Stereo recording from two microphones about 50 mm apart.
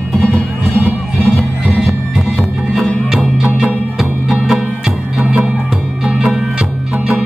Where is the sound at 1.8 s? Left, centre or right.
Centre.